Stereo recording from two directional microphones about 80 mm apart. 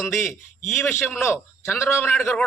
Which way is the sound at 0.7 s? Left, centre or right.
Left.